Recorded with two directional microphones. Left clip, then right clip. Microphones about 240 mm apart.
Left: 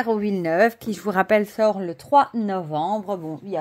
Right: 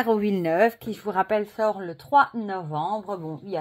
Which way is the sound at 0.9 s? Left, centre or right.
Left.